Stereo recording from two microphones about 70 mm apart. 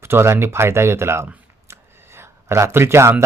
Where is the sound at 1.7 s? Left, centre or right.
Right.